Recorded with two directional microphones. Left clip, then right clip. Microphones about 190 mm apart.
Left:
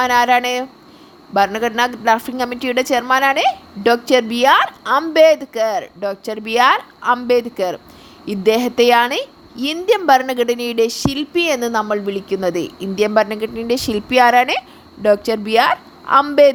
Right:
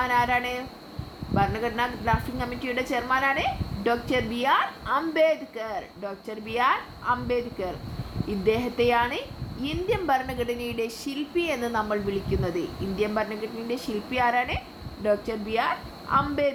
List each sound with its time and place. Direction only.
0.0 s a woman's voice: 60° left (ahead or behind)